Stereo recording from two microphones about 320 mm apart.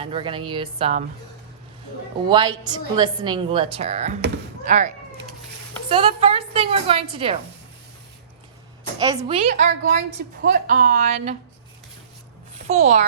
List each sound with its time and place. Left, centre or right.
0.0 s a woman's voice: centre
2.3 s a woman's voice: centre
5.9 s a woman's voice: centre
9.0 s a woman's voice: centre
12.6 s a child's voice: centre